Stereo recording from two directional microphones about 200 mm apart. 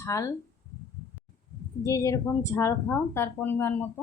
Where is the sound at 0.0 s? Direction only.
15° left (ahead or behind).